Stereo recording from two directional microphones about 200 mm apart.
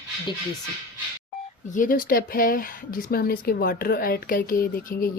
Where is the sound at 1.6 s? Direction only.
40° left (ahead or behind).